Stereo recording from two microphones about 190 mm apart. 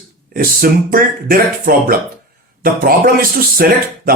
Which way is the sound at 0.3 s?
50° right (ahead or behind).